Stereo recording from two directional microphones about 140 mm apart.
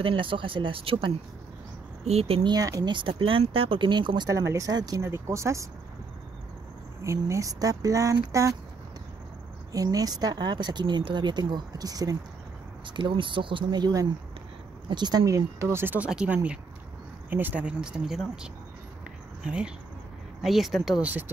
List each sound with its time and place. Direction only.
0.0 s speech: 40° right (ahead or behind)
2.5 s speech: 25° right (ahead or behind)
7.0 s speech: 20° right (ahead or behind)
9.7 s speech: 25° right (ahead or behind)